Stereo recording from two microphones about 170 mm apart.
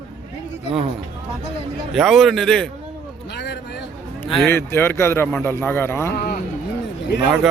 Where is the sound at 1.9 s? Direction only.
Centre (ahead or behind).